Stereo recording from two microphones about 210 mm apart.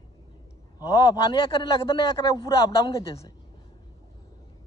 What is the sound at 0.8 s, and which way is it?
Speech, 20° left (ahead or behind).